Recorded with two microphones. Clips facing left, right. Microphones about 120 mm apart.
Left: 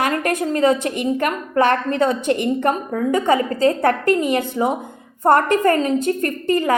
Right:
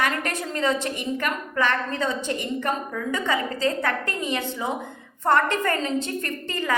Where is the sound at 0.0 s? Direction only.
45° left (ahead or behind).